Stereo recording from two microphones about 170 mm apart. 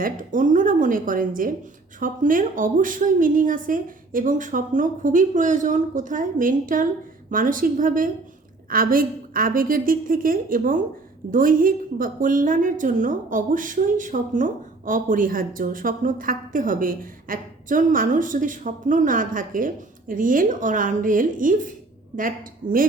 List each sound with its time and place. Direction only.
0.0 s a woman's voice: 50° right (ahead or behind)